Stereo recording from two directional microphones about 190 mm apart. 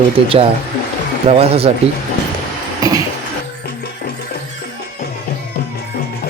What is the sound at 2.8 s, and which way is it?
Cough, 20° right (ahead or behind).